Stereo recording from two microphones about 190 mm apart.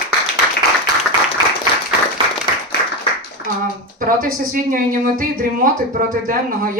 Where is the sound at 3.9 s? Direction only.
50° right (ahead or behind).